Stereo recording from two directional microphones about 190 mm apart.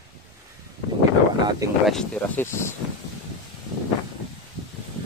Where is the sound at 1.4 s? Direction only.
15° right (ahead or behind).